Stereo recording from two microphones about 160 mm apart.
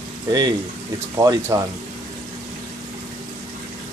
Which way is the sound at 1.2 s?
20° right (ahead or behind).